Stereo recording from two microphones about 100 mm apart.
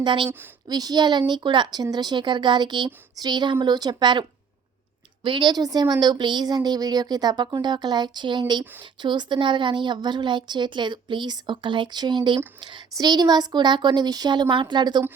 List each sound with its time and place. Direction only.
0.0 s a woman's voice: 55° right (ahead or behind)
0.3 s speech: 20° right (ahead or behind)
0.7 s a woman's voice: 45° right (ahead or behind)